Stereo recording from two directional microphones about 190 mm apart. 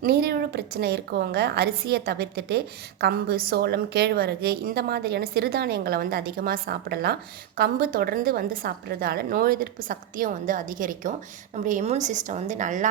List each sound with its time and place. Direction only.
0.0 s a woman's voice: 55° right (ahead or behind)